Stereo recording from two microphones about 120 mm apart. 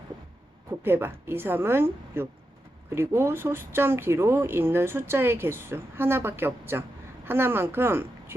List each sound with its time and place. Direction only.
0.9 s speech: 20° right (ahead or behind)